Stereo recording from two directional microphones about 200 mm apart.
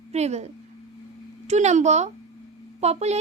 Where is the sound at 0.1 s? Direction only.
35° right (ahead or behind).